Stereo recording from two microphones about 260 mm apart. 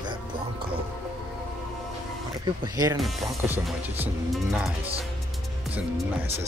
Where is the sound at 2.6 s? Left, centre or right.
Centre.